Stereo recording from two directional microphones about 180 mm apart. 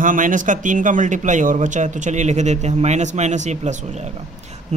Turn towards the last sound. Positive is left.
turn(degrees=-40)  # may be behind; listen again after turning